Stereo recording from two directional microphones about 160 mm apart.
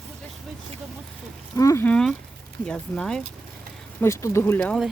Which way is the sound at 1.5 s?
20° left (ahead or behind).